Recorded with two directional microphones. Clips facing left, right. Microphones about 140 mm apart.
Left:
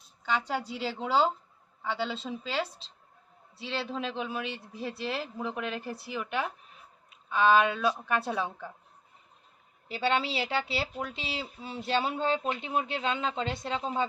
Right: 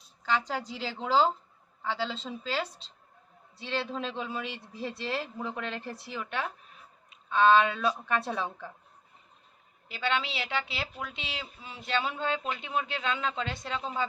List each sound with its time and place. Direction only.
0.3 s speech: 5° left (ahead or behind)
9.9 s a woman's voice: 30° left (ahead or behind)